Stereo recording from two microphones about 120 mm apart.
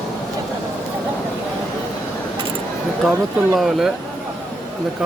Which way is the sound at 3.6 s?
Centre (ahead or behind).